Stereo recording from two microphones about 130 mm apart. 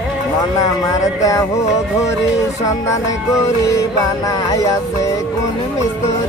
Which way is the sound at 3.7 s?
25° left (ahead or behind).